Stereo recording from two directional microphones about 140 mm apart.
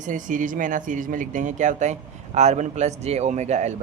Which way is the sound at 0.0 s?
70° right (ahead or behind).